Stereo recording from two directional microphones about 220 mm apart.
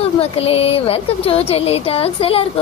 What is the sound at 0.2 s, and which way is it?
Speech, 25° left (ahead or behind).